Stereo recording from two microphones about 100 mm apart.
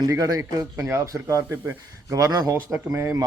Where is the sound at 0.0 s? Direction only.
40° right (ahead or behind).